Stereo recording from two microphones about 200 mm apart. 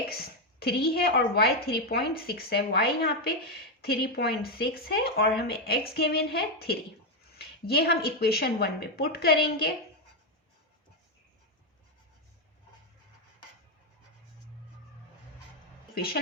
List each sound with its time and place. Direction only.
0.1 s a woman's voice: 50° left (ahead or behind)